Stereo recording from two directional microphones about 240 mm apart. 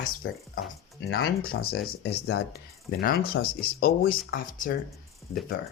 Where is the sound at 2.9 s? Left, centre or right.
Left.